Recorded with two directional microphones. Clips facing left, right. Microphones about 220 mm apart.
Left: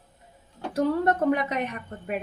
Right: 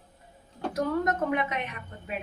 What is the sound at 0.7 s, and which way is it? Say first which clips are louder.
Speech: left 4 dB; 35° left (ahead or behind).